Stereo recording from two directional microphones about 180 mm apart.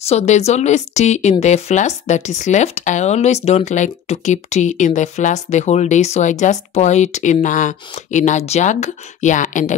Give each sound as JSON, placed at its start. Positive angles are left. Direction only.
{"t": 0.0, "sound": "speech", "side_deg": 35}